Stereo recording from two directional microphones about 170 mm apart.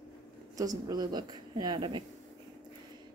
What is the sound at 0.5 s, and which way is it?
Speech, 20° right (ahead or behind).